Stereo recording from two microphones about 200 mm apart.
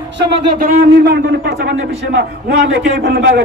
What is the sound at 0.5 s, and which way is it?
Speech, 50° right (ahead or behind).